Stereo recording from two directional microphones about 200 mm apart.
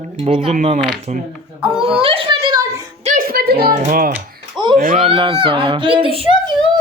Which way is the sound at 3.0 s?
40° right (ahead or behind).